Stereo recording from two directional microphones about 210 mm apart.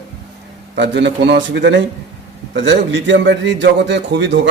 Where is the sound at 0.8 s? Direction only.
55° right (ahead or behind).